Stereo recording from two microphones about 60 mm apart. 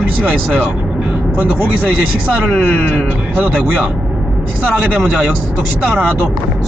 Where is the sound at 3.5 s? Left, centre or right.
Right.